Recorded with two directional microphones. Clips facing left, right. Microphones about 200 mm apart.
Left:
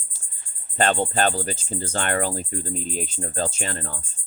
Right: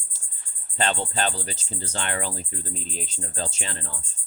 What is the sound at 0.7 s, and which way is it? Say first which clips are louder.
Speech: left 5 dB; 50° left (ahead or behind).